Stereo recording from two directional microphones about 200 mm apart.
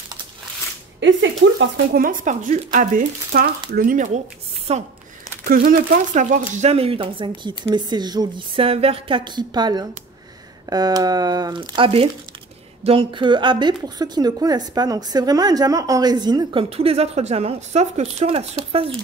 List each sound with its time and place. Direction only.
1.0 s speech: 65° right (ahead or behind)
2.0 s speech: 45° right (ahead or behind)
5.5 s a woman's voice: 45° right (ahead or behind); by 18.9 s 30° right (ahead or behind)